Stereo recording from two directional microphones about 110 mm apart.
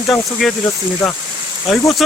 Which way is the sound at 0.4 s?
Centre (ahead or behind).